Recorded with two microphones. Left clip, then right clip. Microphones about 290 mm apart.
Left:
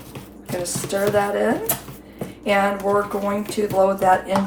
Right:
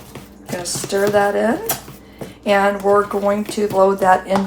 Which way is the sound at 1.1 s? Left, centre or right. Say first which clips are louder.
Right 4 dB; right.